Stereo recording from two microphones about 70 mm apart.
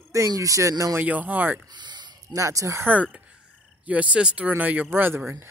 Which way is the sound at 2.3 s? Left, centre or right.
Right.